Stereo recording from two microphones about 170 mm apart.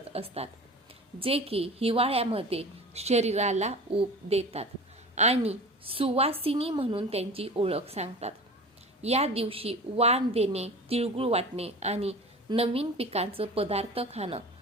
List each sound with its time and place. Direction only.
0.1 s a woman's voice: 35° right (ahead or behind)